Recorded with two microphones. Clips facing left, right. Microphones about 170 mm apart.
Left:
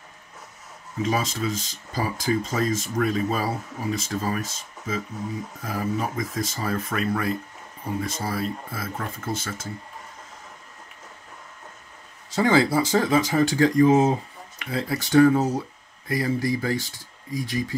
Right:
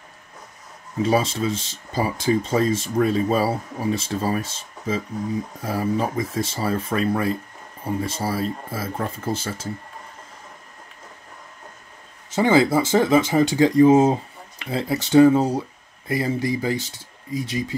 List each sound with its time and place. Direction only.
1.0 s speech: 30° right (ahead or behind)
12.4 s speech: 20° right (ahead or behind)